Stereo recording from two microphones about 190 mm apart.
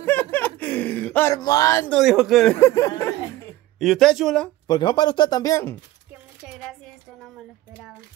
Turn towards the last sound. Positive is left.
turn(degrees=0)  # may be behind; listen again after turning